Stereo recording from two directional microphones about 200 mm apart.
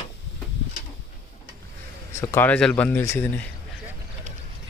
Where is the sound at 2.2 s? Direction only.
10° left (ahead or behind).